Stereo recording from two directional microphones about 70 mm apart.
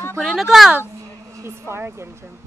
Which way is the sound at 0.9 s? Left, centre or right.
Right.